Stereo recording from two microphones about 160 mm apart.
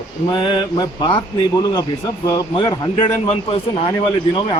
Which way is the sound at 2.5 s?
30° left (ahead or behind).